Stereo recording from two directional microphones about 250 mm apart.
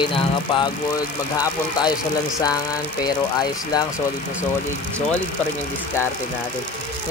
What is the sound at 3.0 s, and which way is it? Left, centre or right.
Speech, centre.